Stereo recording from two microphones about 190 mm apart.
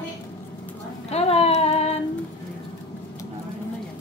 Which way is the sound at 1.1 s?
30° left (ahead or behind).